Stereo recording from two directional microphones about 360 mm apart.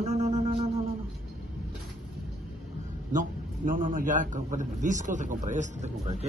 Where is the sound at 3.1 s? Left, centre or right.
Right.